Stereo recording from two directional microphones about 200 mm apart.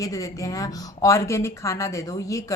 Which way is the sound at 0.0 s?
15° left (ahead or behind).